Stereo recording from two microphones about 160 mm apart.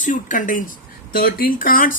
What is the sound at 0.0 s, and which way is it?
A woman's voice, 55° left (ahead or behind).